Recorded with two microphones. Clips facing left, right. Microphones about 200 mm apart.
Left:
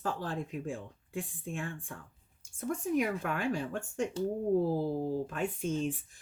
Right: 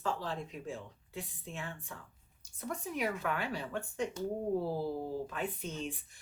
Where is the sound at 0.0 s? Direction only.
50° left (ahead or behind).